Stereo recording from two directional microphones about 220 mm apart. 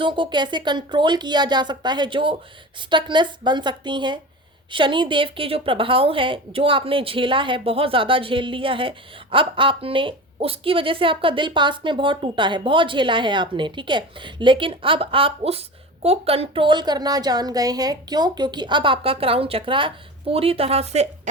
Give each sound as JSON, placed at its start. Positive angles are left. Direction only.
{"t": 0.0, "sound": "a woman's voice", "side_deg": -20}